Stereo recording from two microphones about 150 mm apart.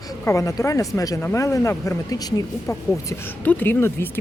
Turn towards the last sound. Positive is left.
turn(degrees=15)  # may be behind; listen again after turning